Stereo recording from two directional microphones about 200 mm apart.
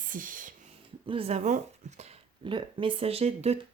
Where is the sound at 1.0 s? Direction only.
30° right (ahead or behind).